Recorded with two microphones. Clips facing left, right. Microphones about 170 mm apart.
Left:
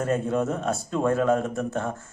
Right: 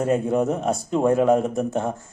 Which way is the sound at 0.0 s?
15° right (ahead or behind).